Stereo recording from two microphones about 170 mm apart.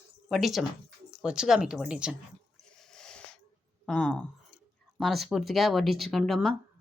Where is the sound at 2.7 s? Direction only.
5° left (ahead or behind).